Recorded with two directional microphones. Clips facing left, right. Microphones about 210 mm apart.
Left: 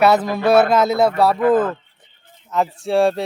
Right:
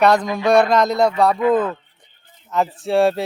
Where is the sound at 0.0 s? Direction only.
5° left (ahead or behind).